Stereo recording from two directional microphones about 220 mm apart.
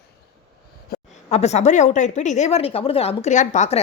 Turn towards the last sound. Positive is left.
turn(degrees=30)  # may be behind; listen again after turning